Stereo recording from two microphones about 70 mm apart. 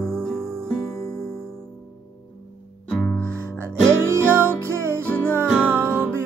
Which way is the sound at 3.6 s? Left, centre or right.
Right.